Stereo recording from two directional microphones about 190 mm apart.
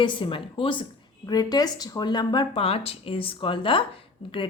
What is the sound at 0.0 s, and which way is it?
Speech, 25° left (ahead or behind).